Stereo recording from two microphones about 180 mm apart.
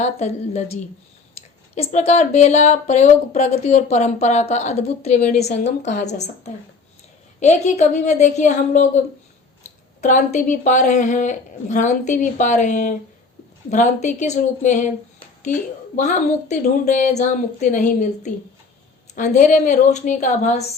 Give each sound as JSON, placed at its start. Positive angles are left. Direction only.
{"t": 0.0, "sound": "speech", "side_deg": 35}
{"t": 1.7, "sound": "speech", "side_deg": 40}
{"t": 10.0, "sound": "a woman's voice", "side_deg": 40}
{"t": 16.0, "sound": "a woman's voice", "side_deg": 40}